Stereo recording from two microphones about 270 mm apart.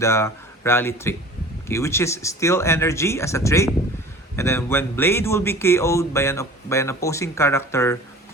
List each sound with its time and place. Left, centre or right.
0.0 s speech: centre